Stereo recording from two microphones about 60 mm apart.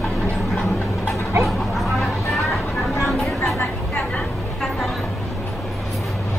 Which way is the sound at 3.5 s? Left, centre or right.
Centre.